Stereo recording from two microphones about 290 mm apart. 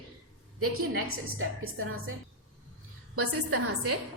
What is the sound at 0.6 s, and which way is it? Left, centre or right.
A woman's voice, right.